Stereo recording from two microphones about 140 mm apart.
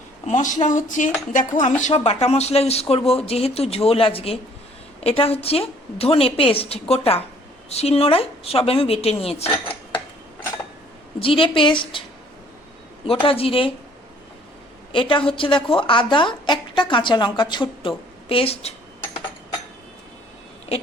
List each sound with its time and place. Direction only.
0.3 s speech: 60° left (ahead or behind)
1.9 s a woman's voice: 50° left (ahead or behind)
11.2 s a woman's voice: 40° left (ahead or behind)
13.2 s a woman's voice: 40° left (ahead or behind)
14.9 s a woman's voice: 35° left (ahead or behind)